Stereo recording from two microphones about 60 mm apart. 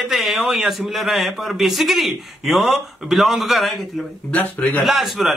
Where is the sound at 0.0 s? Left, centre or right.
Centre.